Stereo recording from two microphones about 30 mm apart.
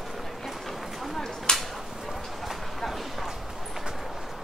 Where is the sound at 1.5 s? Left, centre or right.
Left.